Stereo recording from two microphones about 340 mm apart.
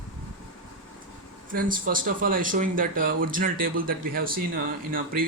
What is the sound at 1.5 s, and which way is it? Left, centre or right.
Speech, right.